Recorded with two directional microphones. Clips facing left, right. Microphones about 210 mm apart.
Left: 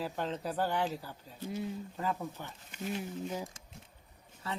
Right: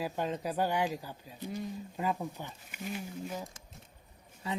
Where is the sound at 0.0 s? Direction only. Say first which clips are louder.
Right 2 dB; 15° right (ahead or behind).